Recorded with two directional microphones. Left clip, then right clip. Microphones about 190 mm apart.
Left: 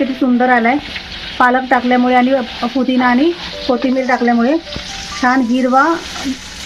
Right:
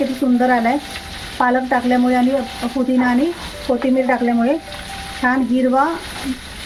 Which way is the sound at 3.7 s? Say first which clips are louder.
Left 2 dB; 40° left (ahead or behind).